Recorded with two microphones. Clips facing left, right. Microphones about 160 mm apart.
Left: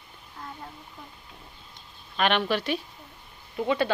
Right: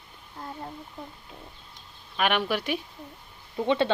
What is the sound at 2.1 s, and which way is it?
Speech, 10° right (ahead or behind).